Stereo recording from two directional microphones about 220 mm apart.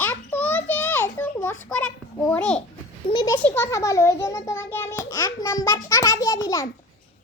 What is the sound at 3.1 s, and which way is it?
A child's voice, 20° left (ahead or behind).